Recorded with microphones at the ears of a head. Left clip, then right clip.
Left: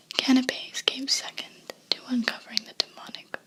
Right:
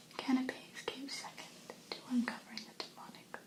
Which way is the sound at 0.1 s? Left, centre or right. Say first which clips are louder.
Left 13 dB; left.